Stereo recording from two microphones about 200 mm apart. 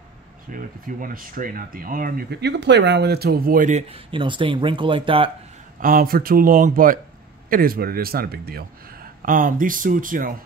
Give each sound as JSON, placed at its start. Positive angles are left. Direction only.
{"t": 0.5, "sound": "speech", "side_deg": -45}
{"t": 5.8, "sound": "speech", "side_deg": -45}